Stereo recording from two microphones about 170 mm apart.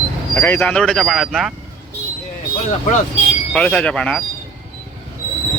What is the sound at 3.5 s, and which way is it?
Speech, 5° left (ahead or behind).